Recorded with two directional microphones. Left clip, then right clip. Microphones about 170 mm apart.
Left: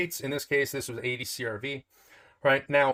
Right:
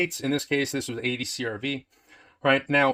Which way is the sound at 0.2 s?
30° right (ahead or behind).